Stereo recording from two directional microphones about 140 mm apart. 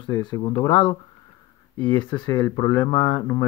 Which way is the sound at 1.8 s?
15° left (ahead or behind).